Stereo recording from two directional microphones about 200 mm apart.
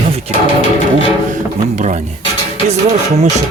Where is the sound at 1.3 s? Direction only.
35° right (ahead or behind).